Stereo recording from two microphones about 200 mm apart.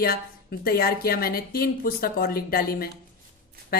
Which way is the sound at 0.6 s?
50° left (ahead or behind).